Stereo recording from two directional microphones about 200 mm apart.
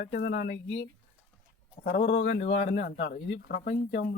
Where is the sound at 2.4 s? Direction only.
35° left (ahead or behind).